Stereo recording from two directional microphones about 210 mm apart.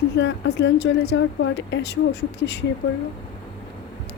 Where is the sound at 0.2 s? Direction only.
55° left (ahead or behind).